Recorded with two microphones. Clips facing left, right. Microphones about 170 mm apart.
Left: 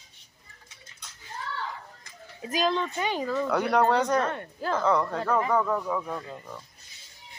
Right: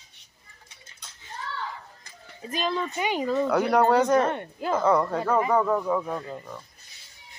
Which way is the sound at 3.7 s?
5° right (ahead or behind).